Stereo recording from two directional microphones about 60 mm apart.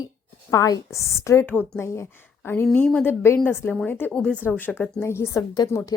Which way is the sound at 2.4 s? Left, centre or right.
Left.